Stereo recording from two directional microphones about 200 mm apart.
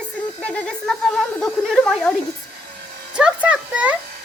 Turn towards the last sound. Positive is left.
turn(degrees=-5)  # may be behind; listen again after turning